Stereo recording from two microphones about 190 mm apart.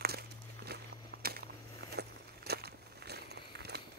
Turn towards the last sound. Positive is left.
turn(degrees=-60)  # may be behind; listen again after turning